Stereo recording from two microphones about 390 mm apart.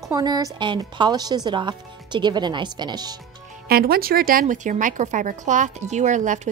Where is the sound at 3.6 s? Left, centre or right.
Right.